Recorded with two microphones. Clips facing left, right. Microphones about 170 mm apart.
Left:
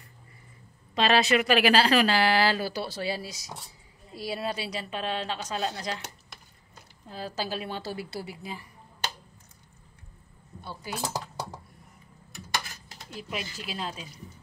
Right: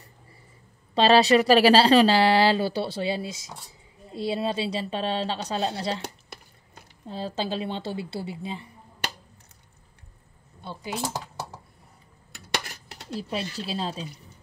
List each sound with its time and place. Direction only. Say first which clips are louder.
0.9 s a woman's voice: right 5 dB; 30° right (ahead or behind)
7.1 s speech: right 4 dB; 25° right (ahead or behind)
10.6 s cutlery: right 3 dB; 20° right (ahead or behind)
12.4 s a sound: right 2 dB; 70° right (ahead or behind)
13.1 s a woman's voice: right 6 dB; 35° right (ahead or behind)